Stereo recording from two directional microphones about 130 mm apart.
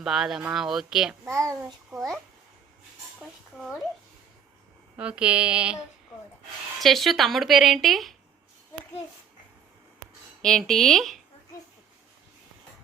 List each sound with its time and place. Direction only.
0.0 s speech: 5° right (ahead or behind)
1.9 s speech: 25° right (ahead or behind)
3.2 s speech: centre (ahead or behind)
4.9 s female singing: 10° right (ahead or behind)
6.8 s speech: centre (ahead or behind)
10.4 s speech: 5° left (ahead or behind)